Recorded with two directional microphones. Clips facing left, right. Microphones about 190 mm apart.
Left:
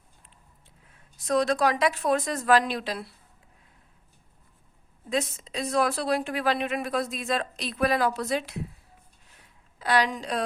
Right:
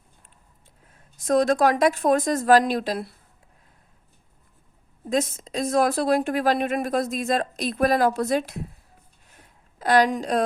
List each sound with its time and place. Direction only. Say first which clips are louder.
1.2 s speech: right 4 dB; 45° right (ahead or behind)
5.0 s speech: right 4 dB; 45° right (ahead or behind)
9.3 s a sound: right 7 dB; 45° right (ahead or behind)